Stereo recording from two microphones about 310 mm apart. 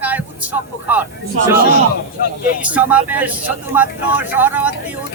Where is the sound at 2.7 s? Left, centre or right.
Centre.